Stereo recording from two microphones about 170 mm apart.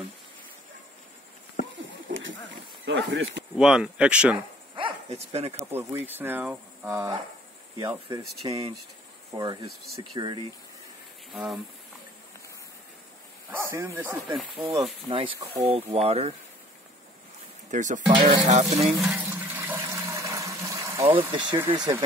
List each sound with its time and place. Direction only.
1.6 s a sound: 50° left (ahead or behind)
2.2 s a sound: 90° right
3.5 s speech: 5° right (ahead or behind)
4.7 s speech: 35° right (ahead or behind)
5.7 s speech: 15° right (ahead or behind)
7.7 s speech: 25° right (ahead or behind)
11.3 s speech: centre (ahead or behind)
13.5 s speech: 15° right (ahead or behind)
15.0 s speech: 30° right (ahead or behind)
17.6 s speech: 45° right (ahead or behind)
18.0 s speech: 25° right (ahead or behind)
18.5 s speech: 40° right (ahead or behind)
18.9 s toilet flush: 5° right (ahead or behind)
21.0 s speech: 30° right (ahead or behind)